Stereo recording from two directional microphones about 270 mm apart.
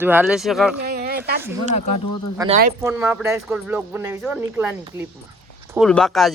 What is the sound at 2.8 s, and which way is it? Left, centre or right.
Speech, centre.